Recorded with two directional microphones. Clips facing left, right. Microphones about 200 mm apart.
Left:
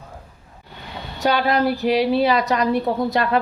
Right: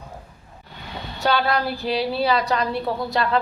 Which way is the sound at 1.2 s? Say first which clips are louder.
Left 3 dB; 15° left (ahead or behind).